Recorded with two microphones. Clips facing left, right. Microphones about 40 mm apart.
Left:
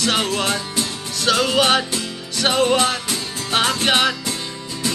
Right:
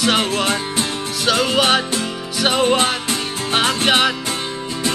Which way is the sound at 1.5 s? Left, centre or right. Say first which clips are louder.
Right 1 dB; centre.